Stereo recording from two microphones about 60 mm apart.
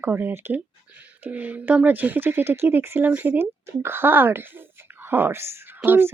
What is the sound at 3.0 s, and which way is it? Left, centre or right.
Speech, right.